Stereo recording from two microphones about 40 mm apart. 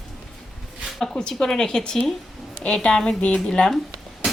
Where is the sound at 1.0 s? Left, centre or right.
Centre.